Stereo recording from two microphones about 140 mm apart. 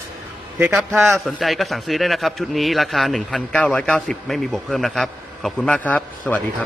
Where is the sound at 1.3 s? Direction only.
Centre (ahead or behind).